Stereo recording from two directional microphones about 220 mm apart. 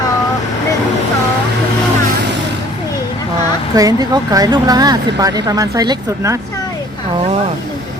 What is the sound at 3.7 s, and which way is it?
Speech, 15° right (ahead or behind).